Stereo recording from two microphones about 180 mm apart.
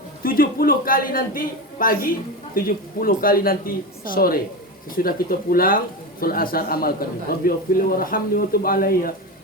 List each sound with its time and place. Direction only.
0.2 s a man's voice: 55° left (ahead or behind)